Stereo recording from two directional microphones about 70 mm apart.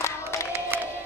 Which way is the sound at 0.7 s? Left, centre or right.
Right.